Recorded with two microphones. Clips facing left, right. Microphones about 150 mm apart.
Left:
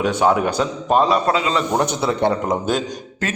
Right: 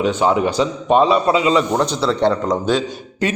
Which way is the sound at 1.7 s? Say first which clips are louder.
Right 1 dB; 15° left (ahead or behind).